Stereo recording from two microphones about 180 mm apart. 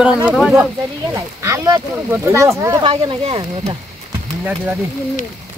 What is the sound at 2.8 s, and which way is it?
Speech, 25° right (ahead or behind).